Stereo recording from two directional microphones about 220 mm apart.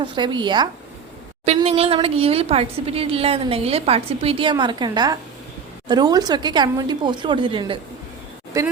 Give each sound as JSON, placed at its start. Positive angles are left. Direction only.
{"t": 0.0, "sound": "a woman's voice", "side_deg": -20}